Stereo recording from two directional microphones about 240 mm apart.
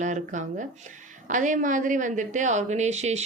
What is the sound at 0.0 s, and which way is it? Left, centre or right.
A woman's voice, right.